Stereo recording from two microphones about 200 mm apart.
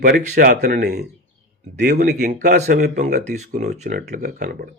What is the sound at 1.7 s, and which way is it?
Speech, 40° right (ahead or behind).